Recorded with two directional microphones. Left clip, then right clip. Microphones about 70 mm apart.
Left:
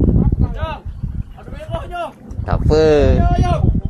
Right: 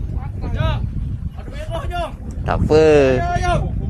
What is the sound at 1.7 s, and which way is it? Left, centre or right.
Boat, right.